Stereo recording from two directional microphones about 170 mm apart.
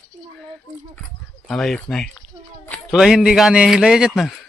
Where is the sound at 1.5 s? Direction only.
5° left (ahead or behind).